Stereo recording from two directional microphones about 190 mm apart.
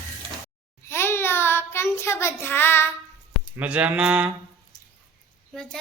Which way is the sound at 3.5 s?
5° right (ahead or behind).